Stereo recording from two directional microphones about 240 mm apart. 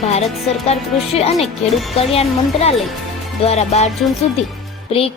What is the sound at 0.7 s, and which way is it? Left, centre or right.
Speech, left.